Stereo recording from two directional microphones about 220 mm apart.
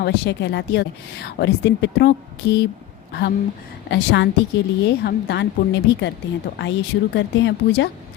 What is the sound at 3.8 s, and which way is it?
Speech, 50° left (ahead or behind).